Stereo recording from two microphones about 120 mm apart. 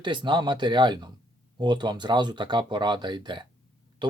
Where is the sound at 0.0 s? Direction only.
40° right (ahead or behind).